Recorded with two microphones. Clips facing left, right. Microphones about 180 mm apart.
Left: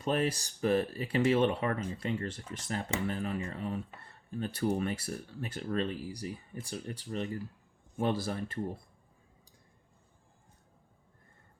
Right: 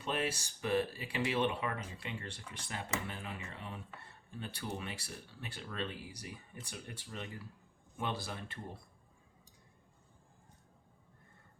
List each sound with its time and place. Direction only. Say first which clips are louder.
0.0 s speech: left 6 dB; 40° left (ahead or behind)